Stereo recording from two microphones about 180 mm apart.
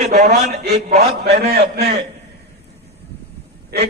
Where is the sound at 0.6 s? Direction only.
65° right (ahead or behind).